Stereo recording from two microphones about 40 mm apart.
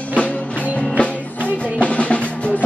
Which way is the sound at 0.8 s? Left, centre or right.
Left.